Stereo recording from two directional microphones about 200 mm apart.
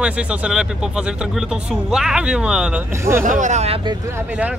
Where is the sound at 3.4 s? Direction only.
35° right (ahead or behind).